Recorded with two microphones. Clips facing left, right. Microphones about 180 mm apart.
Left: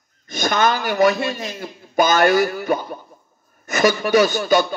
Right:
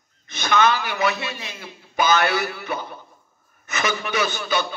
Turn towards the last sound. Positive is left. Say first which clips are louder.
# left 8 dB
turn(degrees=45)  # may be behind; listen again after turning